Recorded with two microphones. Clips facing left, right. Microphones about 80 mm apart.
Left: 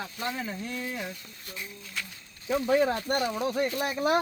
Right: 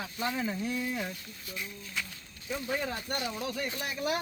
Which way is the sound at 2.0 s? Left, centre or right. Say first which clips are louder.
Even; centre.